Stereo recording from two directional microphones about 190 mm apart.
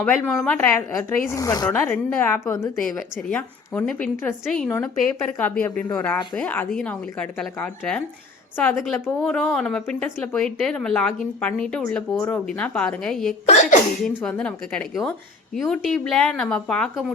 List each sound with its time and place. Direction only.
0.0 s a woman's voice: 5° left (ahead or behind); by 1.8 s 20° left (ahead or behind)
1.9 s a woman's voice: 10° left (ahead or behind)